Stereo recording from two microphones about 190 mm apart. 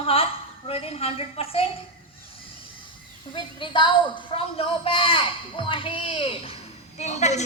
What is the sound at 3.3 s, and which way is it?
A woman's voice, 25° left (ahead or behind).